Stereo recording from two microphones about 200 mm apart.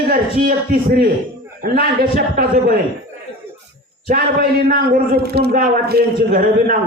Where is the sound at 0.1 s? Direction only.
45° right (ahead or behind).